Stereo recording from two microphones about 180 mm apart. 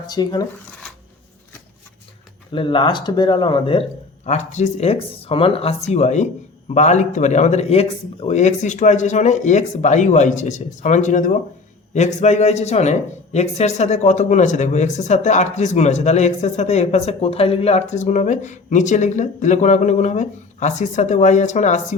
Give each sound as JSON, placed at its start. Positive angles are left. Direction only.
{"t": 0.1, "sound": "speech", "side_deg": 20}
{"t": 2.5, "sound": "speech", "side_deg": 25}
{"t": 4.3, "sound": "speech", "side_deg": 40}